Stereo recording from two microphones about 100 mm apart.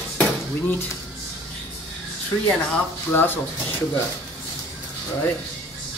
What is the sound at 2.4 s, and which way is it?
Speech, 20° left (ahead or behind).